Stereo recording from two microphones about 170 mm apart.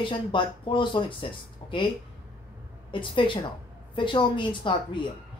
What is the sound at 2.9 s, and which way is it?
A woman's voice, 30° left (ahead or behind).